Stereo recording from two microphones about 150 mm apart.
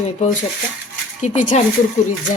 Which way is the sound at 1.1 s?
55° left (ahead or behind).